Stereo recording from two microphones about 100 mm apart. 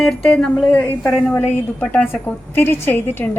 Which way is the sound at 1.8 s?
15° left (ahead or behind).